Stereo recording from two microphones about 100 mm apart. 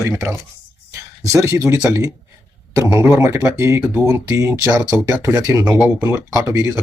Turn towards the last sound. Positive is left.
turn(degrees=-30)  # may be behind; listen again after turning